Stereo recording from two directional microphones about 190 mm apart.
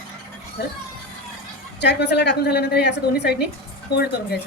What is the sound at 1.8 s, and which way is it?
A woman's voice, 65° left (ahead or behind).